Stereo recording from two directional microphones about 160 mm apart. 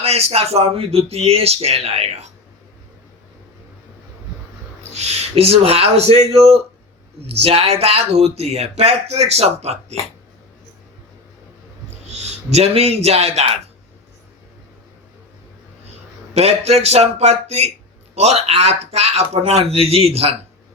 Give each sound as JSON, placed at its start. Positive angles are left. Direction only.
{"t": 0.0, "sound": "speech", "side_deg": -40}
{"t": 4.9, "sound": "speech", "side_deg": -40}
{"t": 12.1, "sound": "a man's voice", "side_deg": -40}
{"t": 16.3, "sound": "a man's voice", "side_deg": -40}